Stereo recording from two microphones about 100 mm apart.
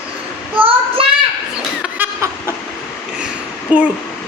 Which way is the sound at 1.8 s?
15° right (ahead or behind).